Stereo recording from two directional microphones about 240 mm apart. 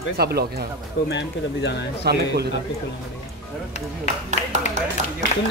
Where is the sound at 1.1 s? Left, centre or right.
Left.